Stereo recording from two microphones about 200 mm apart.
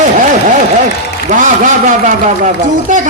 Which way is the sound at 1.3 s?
40° right (ahead or behind).